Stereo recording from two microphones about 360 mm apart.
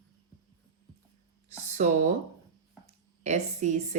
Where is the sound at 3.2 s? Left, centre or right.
Centre.